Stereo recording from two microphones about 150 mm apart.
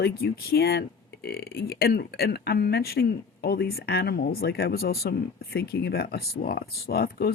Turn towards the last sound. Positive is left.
turn(degrees=90)